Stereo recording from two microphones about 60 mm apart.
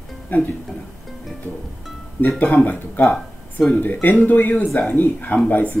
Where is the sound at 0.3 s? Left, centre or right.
Left.